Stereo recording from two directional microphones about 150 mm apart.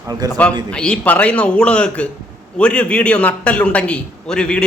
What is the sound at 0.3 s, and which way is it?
A man's voice, 10° left (ahead or behind).